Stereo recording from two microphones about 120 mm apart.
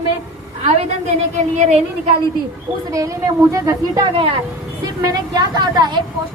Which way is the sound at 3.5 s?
25° right (ahead or behind).